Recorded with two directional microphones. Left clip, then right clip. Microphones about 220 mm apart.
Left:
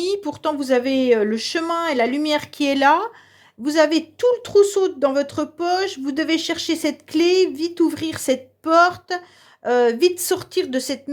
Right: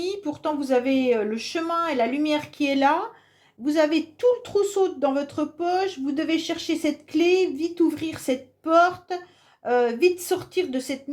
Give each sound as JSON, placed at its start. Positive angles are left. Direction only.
{"t": 0.0, "sound": "speech", "side_deg": 40}